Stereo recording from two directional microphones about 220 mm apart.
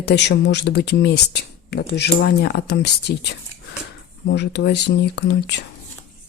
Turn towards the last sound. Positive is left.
turn(degrees=50)  # may be behind; listen again after turning